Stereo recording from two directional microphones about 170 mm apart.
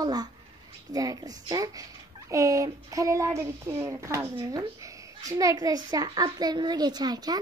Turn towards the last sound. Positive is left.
turn(degrees=-25)  # may be behind; listen again after turning